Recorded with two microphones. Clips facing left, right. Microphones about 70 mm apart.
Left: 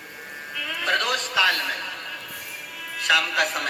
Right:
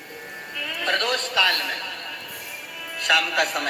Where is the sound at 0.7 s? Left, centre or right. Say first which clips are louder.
Even; centre.